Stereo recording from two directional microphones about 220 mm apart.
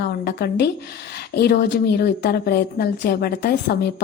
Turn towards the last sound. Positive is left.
turn(degrees=45)  # may be behind; listen again after turning